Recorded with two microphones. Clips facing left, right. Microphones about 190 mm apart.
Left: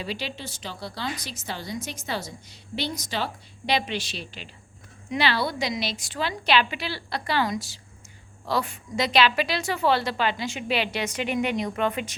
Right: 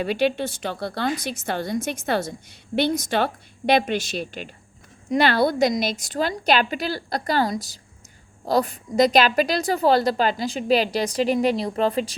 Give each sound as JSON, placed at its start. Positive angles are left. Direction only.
{"t": 0.0, "sound": "a woman's voice", "side_deg": -55}